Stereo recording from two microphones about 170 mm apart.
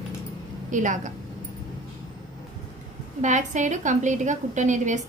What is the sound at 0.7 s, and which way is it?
Speech, 50° right (ahead or behind).